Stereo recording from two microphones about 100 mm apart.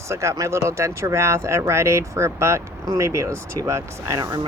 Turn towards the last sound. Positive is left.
turn(degrees=-35)  # may be behind; listen again after turning